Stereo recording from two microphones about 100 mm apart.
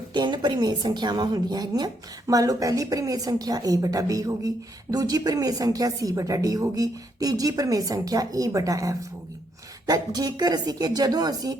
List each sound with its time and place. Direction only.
0.1 s a woman's voice: 50° right (ahead or behind)